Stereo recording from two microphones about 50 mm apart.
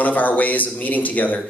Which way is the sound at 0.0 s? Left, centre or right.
Left.